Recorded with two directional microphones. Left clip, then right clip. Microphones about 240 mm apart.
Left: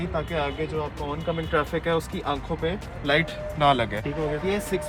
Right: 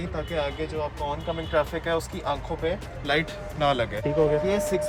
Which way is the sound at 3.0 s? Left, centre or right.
Centre.